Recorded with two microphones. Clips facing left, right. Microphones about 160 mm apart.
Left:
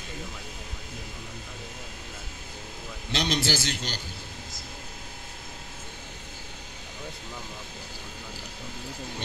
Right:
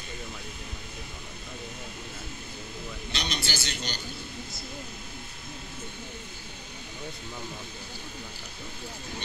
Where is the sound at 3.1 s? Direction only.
90° left.